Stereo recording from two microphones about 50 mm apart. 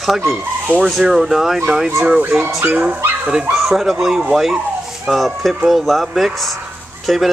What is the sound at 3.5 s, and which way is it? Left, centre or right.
Speech, centre.